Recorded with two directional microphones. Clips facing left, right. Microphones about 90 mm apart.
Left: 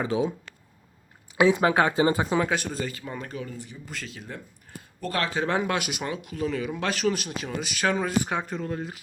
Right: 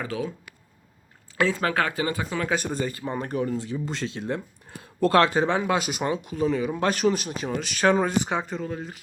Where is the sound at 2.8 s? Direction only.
35° right (ahead or behind).